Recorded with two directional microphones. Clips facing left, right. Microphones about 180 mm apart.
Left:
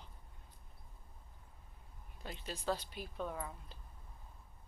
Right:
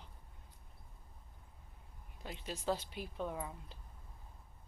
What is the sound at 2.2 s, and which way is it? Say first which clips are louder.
Speech: right 1 dB; 15° right (ahead or behind).